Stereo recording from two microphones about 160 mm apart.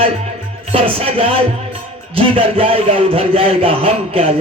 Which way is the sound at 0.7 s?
35° right (ahead or behind).